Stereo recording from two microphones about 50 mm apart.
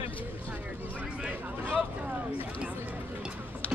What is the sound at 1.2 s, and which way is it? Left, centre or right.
Speech, right.